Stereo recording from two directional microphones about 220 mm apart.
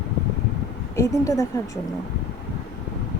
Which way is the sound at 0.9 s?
15° left (ahead or behind).